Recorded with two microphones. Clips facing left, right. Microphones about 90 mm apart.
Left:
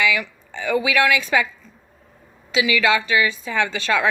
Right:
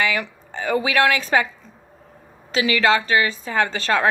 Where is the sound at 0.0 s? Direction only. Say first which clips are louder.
Left 1 dB; 40° right (ahead or behind).